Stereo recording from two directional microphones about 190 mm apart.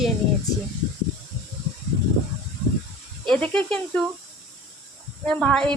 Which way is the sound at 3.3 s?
5° left (ahead or behind).